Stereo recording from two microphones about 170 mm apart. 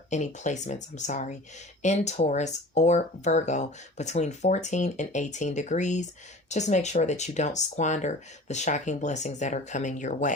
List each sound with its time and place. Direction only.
0.1 s speech: 45° left (ahead or behind)